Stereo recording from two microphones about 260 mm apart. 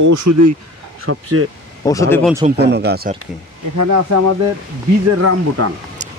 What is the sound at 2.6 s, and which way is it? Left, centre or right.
Speech, right.